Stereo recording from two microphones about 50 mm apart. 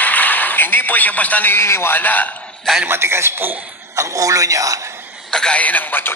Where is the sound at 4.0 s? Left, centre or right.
Right.